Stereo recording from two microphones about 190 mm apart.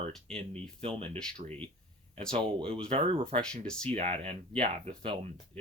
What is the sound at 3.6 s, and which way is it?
Speech, 5° left (ahead or behind).